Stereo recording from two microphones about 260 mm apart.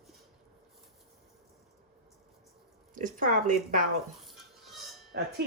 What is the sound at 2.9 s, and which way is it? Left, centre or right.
Speech, right.